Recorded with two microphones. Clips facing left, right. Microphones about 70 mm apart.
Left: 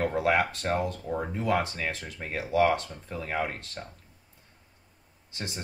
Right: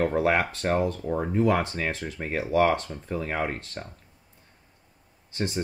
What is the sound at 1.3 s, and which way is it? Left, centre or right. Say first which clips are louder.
Speech: right 5 dB; right.